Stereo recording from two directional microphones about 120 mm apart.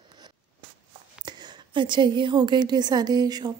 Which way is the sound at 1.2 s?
40° right (ahead or behind).